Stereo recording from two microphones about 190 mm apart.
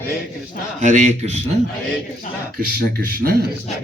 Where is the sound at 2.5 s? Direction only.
55° right (ahead or behind).